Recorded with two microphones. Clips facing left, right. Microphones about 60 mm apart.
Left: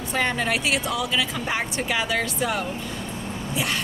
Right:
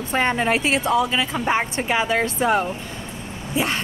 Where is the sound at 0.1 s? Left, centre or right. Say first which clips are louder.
Right 4 dB; right.